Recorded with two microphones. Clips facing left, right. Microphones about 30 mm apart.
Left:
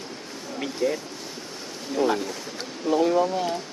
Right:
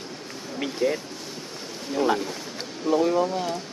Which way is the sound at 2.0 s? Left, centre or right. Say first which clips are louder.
Even; centre.